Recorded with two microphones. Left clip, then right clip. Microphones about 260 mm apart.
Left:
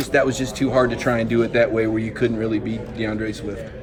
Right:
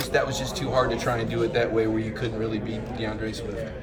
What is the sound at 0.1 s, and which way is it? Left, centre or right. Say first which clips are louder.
A man's voice: left 7 dB; centre.